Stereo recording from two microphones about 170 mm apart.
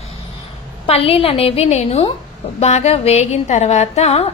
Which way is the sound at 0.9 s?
35° left (ahead or behind).